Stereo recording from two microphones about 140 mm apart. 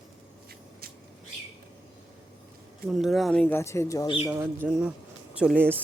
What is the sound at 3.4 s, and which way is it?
Speech, 20° left (ahead or behind).